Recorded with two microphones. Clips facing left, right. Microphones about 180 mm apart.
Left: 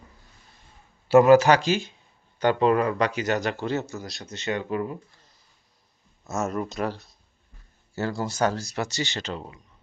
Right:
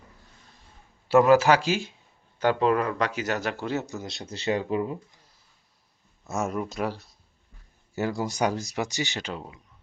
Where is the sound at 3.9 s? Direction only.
20° right (ahead or behind).